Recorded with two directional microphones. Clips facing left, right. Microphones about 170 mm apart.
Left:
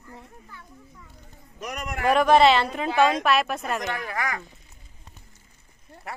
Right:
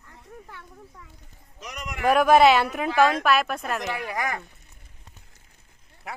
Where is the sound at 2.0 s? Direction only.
5° right (ahead or behind).